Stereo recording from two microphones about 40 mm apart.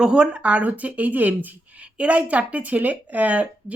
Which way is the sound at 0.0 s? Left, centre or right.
Right.